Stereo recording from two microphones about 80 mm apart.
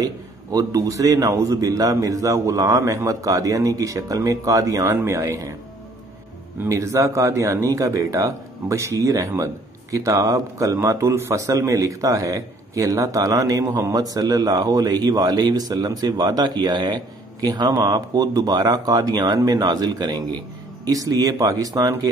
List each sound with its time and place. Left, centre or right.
0.0 s speech: right
6.7 s a man's voice: right